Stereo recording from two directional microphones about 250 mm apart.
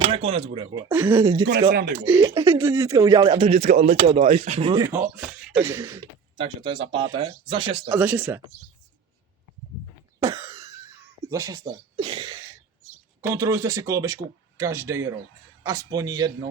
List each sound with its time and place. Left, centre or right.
0.0 s speech: right
1.7 s speech: right
2.2 s speech: centre
6.3 s speech: right
7.9 s speech: centre
10.4 s a sound: centre
11.3 s speech: centre